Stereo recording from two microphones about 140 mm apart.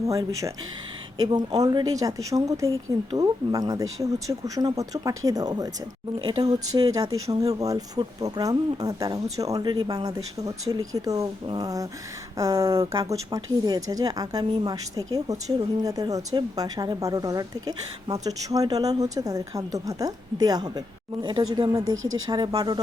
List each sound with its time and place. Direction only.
0.1 s speech: 25° right (ahead or behind)